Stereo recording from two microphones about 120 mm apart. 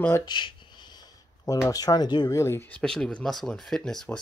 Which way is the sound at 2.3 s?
20° left (ahead or behind).